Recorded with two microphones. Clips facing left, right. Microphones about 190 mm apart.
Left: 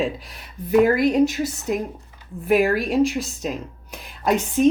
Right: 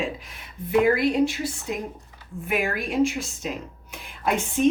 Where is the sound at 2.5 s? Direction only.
40° left (ahead or behind).